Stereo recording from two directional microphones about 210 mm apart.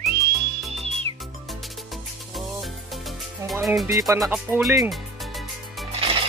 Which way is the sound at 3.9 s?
15° right (ahead or behind).